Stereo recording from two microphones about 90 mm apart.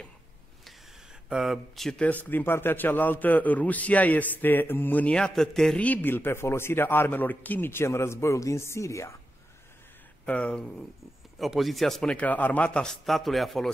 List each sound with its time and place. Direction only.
1.3 s a man's voice: 5° right (ahead or behind)
2.2 s a man's voice: 20° left (ahead or behind); by 5.8 s 5° left (ahead or behind)
5.8 s a man's voice: 15° left (ahead or behind); by 9.1 s 35° left (ahead or behind)
10.2 s speech: 15° left (ahead or behind)
11.3 s a man's voice: centre (ahead or behind)